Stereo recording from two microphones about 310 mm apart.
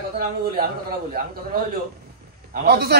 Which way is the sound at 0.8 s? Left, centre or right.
Right.